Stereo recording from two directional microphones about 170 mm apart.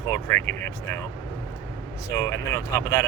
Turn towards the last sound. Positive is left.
turn(degrees=20)  # may be behind; listen again after turning